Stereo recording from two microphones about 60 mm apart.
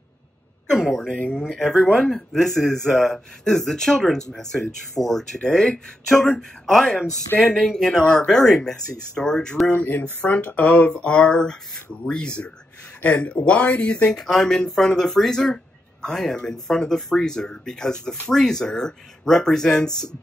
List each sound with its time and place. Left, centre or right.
0.7 s throat clearing: centre
1.4 s speech: centre
9.8 s speech: left
14.2 s speech: centre